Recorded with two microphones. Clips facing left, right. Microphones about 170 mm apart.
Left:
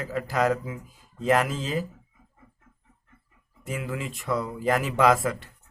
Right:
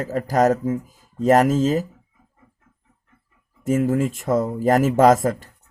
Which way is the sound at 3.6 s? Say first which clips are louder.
Right 13 dB; 45° right (ahead or behind).